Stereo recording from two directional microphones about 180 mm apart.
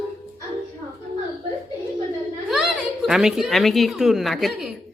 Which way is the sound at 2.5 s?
Centre (ahead or behind).